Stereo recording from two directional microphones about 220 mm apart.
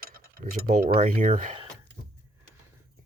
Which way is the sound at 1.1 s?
35° right (ahead or behind).